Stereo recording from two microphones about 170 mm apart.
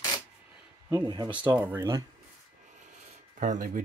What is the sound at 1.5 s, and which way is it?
Speech, 10° right (ahead or behind).